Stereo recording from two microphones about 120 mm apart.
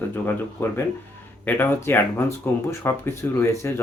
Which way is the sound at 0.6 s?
20° left (ahead or behind).